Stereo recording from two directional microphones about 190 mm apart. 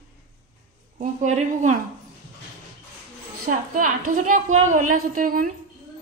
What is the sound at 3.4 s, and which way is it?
A woman's voice, 45° right (ahead or behind).